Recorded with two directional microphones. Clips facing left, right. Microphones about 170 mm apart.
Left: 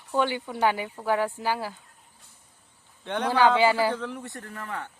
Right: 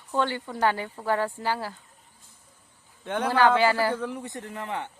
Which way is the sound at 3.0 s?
5° right (ahead or behind).